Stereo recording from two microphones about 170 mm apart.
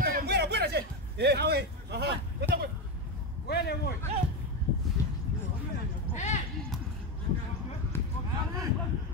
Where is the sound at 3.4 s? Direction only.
70° left (ahead or behind).